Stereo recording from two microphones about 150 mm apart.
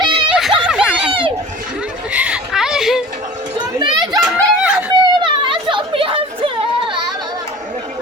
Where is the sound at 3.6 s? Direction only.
30° right (ahead or behind).